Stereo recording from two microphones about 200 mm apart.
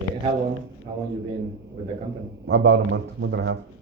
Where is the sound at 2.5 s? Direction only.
60° right (ahead or behind).